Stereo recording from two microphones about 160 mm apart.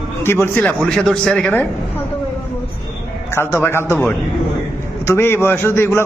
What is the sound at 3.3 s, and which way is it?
A man's voice, 15° left (ahead or behind).